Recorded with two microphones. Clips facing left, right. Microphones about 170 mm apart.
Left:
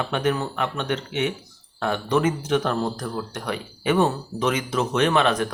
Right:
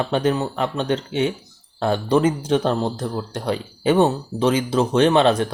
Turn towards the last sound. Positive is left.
turn(degrees=-30)  # may be behind; listen again after turning